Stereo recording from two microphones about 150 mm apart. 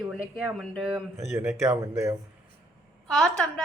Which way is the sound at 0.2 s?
5° right (ahead or behind).